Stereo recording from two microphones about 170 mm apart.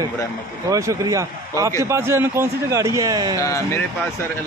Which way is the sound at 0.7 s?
20° right (ahead or behind).